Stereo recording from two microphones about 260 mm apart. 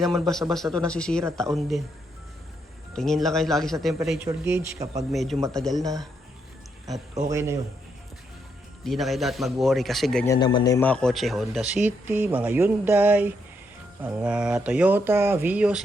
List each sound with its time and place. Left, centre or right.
0.1 s speech: centre
2.9 s speech: centre
5.1 s speech: centre
7.3 s speech: centre
8.8 s speech: centre
10.3 s speech: centre